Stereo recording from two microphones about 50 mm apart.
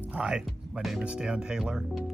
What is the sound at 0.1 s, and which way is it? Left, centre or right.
Speech, right.